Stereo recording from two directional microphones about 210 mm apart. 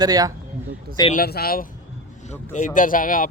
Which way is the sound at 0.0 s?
20° right (ahead or behind).